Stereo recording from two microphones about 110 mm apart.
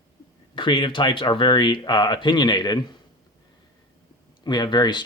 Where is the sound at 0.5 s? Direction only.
45° left (ahead or behind).